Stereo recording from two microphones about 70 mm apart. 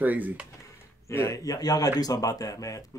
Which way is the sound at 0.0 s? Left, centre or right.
Right.